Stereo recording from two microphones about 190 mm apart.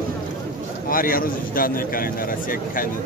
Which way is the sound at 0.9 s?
50° left (ahead or behind).